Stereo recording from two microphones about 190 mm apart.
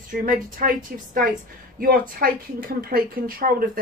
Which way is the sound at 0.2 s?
45° right (ahead or behind).